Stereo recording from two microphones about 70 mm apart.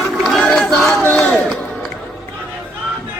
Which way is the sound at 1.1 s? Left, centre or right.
Centre.